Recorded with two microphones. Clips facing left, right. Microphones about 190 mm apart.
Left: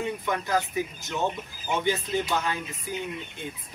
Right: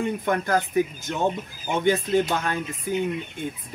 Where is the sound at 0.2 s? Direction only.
50° right (ahead or behind).